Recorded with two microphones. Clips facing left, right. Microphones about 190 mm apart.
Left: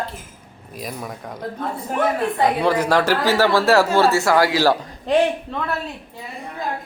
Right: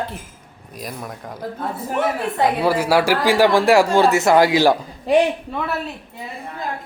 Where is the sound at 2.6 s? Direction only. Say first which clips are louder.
Right 1 dB; 10° right (ahead or behind).